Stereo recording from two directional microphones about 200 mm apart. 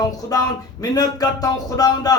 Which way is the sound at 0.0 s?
20° left (ahead or behind).